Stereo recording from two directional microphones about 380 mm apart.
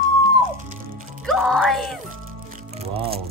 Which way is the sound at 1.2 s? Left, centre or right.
Centre.